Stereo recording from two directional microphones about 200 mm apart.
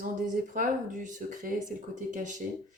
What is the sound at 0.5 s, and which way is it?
Speech, 40° right (ahead or behind).